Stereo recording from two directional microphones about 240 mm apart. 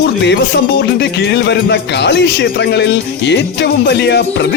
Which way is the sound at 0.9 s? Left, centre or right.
Left.